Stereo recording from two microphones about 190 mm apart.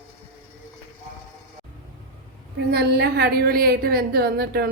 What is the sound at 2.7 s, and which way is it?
A woman's voice, 60° right (ahead or behind).